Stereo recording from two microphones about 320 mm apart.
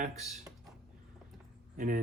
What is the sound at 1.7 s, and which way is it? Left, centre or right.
Speech, right.